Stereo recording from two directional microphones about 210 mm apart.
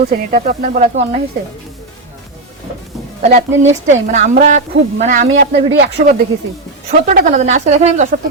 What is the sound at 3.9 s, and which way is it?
Speech, 35° right (ahead or behind).